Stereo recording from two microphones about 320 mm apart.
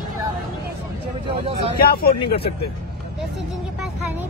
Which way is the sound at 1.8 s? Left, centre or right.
Left.